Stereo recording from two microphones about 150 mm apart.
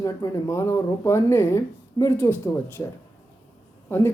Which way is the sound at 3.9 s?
15° left (ahead or behind).